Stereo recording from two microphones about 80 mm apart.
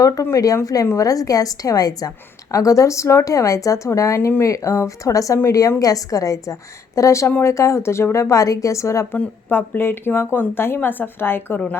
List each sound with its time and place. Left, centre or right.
0.0 s a woman's voice: left
9.1 s a woman's voice: left